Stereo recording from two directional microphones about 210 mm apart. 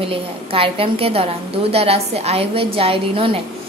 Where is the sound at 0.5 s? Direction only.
25° right (ahead or behind).